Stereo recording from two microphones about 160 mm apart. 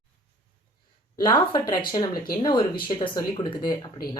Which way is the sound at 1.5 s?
30° left (ahead or behind).